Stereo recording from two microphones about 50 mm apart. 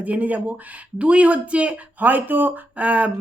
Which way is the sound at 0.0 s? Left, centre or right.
Right.